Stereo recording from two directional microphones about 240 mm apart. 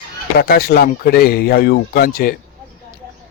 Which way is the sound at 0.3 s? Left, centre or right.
Left.